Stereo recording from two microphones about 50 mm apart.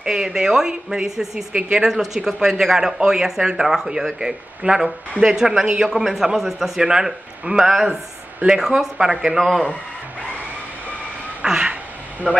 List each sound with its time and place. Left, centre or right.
0.0 s speech: centre
11.4 s a sound: centre
12.2 s speech: right